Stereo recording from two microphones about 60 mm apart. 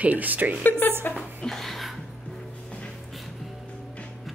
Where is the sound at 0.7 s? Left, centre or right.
Left.